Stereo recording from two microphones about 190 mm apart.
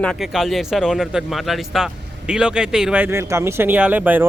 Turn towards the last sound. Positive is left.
turn(degrees=-10)  # may be behind; listen again after turning